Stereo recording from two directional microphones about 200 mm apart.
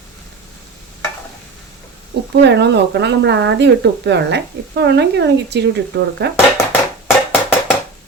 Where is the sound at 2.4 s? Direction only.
60° right (ahead or behind).